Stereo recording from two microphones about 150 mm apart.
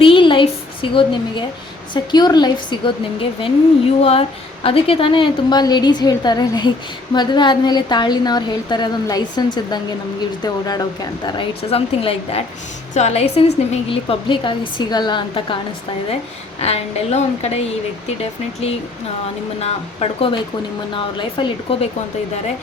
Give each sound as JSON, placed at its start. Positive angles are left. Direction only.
{"t": 0.0, "sound": "a sound", "side_deg": 35}
{"t": 1.9, "sound": "a woman's voice", "side_deg": 30}
{"t": 10.4, "sound": "a woman's voice", "side_deg": 25}
{"t": 16.6, "sound": "a woman's voice", "side_deg": 45}
{"t": 19.5, "sound": "a woman's voice", "side_deg": 45}